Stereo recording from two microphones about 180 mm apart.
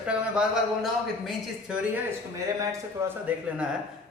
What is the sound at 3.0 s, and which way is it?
Speech, 15° right (ahead or behind).